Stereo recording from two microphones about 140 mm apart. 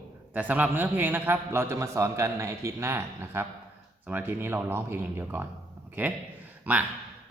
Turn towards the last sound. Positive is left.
turn(degrees=-10)  # may be behind; listen again after turning